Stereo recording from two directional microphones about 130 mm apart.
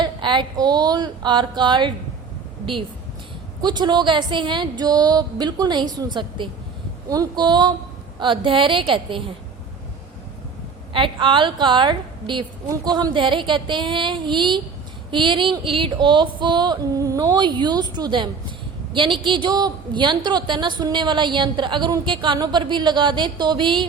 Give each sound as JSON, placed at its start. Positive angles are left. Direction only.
{"t": 0.0, "sound": "a woman's voice", "side_deg": -35}
{"t": 3.6, "sound": "a woman's voice", "side_deg": -35}
{"t": 10.9, "sound": "a woman's voice", "side_deg": -40}